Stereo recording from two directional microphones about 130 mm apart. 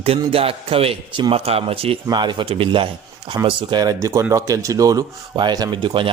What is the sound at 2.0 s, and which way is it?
Speech, 35° right (ahead or behind).